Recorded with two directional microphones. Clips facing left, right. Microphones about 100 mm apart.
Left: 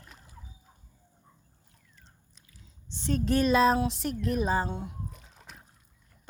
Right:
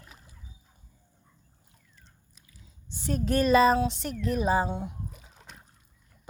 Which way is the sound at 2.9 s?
5° right (ahead or behind).